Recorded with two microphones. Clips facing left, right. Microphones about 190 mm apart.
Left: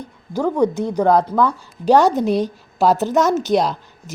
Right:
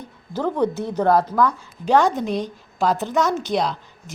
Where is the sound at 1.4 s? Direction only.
35° left (ahead or behind).